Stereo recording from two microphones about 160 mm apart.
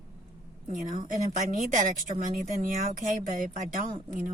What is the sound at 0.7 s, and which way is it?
A woman's voice, 55° right (ahead or behind).